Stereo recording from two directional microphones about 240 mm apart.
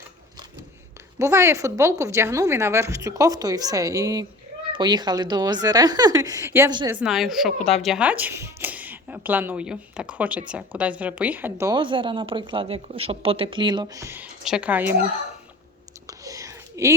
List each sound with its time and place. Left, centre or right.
1.2 s a woman's voice: centre
6.9 s a woman's voice: centre
16.0 s a sound: centre